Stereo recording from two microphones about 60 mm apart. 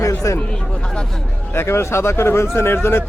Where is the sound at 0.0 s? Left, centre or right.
Left.